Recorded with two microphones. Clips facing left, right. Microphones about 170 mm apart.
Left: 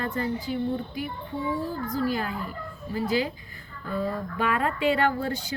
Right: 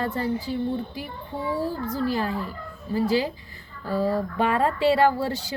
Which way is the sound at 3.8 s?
35° right (ahead or behind).